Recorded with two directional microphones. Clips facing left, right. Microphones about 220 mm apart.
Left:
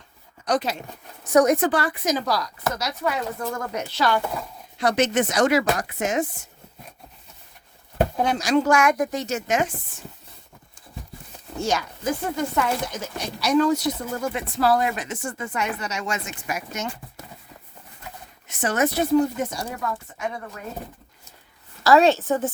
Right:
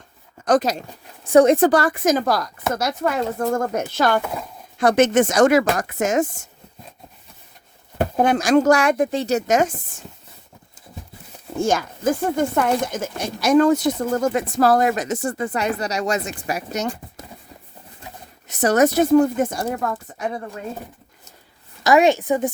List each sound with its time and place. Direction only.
0.4 s speech: 45° right (ahead or behind)
1.3 s speech: 30° right (ahead or behind); by 6.5 s 45° right (ahead or behind)
8.1 s speech: 50° right (ahead or behind)
11.6 s speech: 50° right (ahead or behind)
18.4 s speech: 40° right (ahead or behind)
21.8 s a woman's voice: 15° right (ahead or behind)